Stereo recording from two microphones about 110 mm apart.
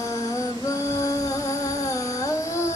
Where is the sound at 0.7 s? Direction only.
30° left (ahead or behind).